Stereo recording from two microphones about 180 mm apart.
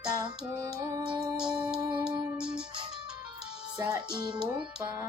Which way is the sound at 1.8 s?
25° right (ahead or behind).